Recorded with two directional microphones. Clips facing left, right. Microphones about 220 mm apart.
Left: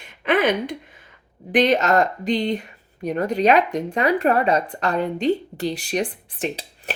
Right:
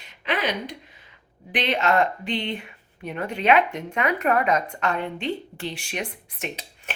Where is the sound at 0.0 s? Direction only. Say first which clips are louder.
Left 8 dB; 50° left (ahead or behind).